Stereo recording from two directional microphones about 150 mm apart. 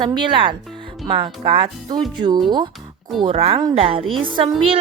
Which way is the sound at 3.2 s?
40° right (ahead or behind).